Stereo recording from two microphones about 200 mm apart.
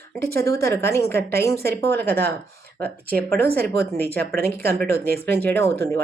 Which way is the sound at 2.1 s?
50° right (ahead or behind).